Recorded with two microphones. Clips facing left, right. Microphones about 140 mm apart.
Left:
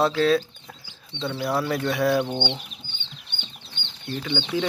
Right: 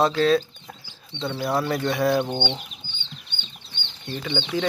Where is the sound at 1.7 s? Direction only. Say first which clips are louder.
Even; 5° left (ahead or behind); by 2.6 s 10° right (ahead or behind).